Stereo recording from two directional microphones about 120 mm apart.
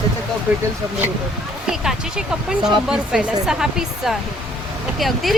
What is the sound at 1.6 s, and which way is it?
Speech, 5° right (ahead or behind).